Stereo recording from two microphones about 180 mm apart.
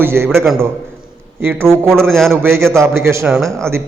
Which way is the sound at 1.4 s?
10° right (ahead or behind).